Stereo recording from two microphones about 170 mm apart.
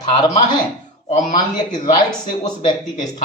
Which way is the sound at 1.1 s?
45° left (ahead or behind).